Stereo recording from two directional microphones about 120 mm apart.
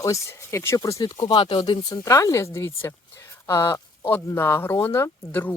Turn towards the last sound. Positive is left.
turn(degrees=20)  # may be behind; listen again after turning